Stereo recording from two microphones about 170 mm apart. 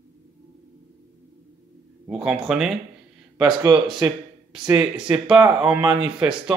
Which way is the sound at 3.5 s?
25° right (ahead or behind).